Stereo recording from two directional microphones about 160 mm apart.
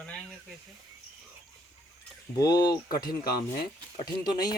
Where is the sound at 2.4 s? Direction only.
25° left (ahead or behind).